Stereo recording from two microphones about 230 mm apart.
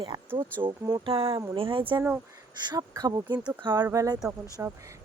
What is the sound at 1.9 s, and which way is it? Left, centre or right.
Speech, centre.